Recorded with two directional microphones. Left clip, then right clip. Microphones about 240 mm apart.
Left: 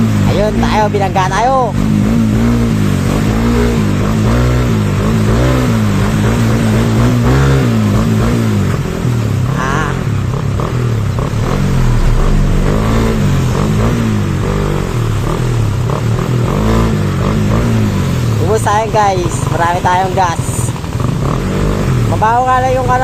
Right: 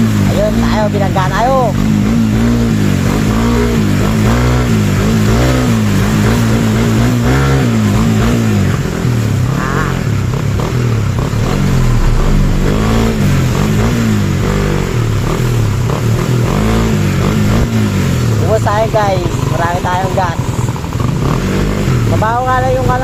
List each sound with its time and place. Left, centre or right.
0.7 s speech: left
18.7 s vehicle: left
22.2 s vehicle: left